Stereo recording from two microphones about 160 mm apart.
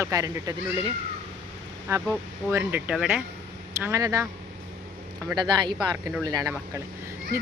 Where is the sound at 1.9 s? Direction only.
15° right (ahead or behind).